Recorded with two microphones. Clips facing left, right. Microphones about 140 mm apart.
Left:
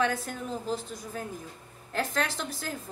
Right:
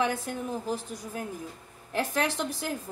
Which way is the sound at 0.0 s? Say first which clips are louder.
Even; 15° right (ahead or behind).